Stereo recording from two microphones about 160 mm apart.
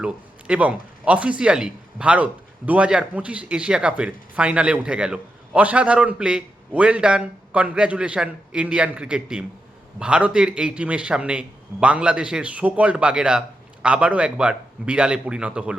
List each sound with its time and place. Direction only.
0.0 s speech: 5° right (ahead or behind)